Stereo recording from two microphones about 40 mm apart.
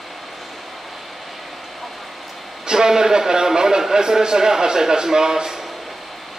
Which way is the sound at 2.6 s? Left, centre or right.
Centre.